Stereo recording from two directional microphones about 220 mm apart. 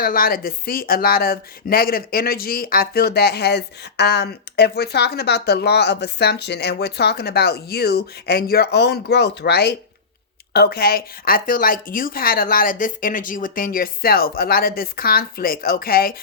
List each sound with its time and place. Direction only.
0.0 s a woman's voice: 40° left (ahead or behind)